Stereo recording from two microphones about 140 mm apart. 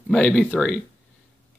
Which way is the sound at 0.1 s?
5° left (ahead or behind).